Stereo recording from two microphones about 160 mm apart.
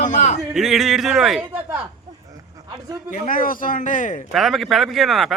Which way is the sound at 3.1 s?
55° left (ahead or behind).